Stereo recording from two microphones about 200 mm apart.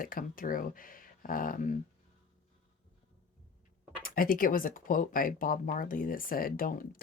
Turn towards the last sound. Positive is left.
turn(degrees=45)  # may be behind; listen again after turning